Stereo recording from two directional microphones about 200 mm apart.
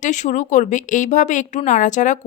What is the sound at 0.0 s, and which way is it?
A woman's voice, 40° left (ahead or behind).